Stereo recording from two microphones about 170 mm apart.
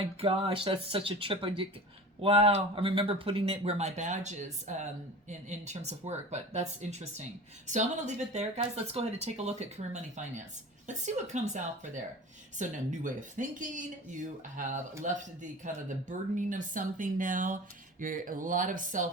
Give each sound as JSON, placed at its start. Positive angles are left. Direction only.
{"t": 0.2, "sound": "speech", "side_deg": -35}